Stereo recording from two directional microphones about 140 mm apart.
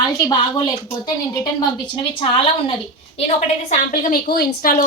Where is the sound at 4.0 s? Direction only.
85° left.